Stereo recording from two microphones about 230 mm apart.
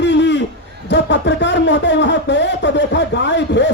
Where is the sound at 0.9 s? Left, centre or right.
Left.